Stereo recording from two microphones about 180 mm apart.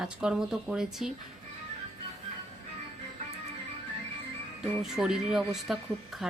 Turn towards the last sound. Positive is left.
turn(degrees=0)  # may be behind; listen again after turning